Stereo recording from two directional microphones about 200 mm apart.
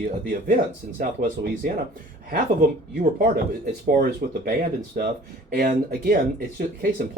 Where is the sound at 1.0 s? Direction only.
45° right (ahead or behind).